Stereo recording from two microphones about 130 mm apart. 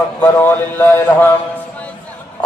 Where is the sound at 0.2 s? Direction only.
15° left (ahead or behind).